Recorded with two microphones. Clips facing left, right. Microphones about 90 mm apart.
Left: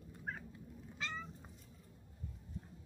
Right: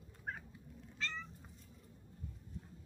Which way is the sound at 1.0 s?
10° left (ahead or behind).